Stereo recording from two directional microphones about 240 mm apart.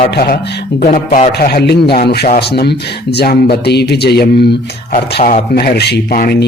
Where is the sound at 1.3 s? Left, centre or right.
Left.